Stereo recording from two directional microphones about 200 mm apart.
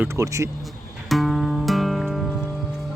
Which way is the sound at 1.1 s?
Centre (ahead or behind).